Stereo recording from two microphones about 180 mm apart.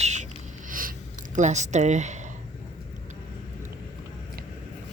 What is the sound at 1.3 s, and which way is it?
Speech, 40° right (ahead or behind).